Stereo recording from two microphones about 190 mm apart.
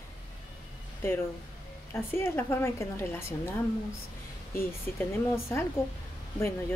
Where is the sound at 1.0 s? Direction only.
15° left (ahead or behind).